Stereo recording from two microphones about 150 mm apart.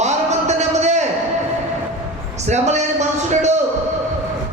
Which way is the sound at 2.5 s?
50° right (ahead or behind).